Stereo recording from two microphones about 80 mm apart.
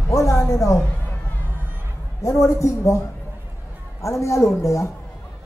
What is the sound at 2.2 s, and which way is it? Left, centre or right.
Speech, left.